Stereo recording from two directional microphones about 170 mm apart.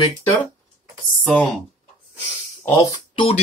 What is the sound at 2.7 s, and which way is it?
Speech, 20° left (ahead or behind).